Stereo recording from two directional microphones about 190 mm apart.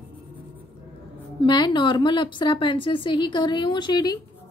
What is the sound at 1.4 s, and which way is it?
A woman's voice, 25° left (ahead or behind).